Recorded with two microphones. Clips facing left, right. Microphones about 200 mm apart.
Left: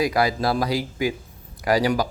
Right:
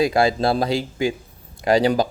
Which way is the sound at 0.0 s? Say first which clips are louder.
Right 3 dB; 25° right (ahead or behind).